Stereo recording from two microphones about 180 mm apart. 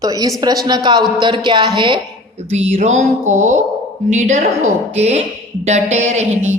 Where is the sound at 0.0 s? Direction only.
20° right (ahead or behind).